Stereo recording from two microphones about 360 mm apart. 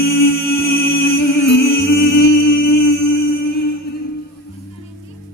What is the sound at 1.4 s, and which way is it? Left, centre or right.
Music, left.